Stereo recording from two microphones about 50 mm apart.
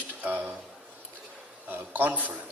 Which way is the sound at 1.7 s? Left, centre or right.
Right.